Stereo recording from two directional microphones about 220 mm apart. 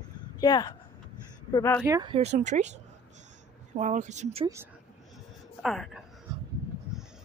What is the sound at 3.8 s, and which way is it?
Speech, 35° right (ahead or behind).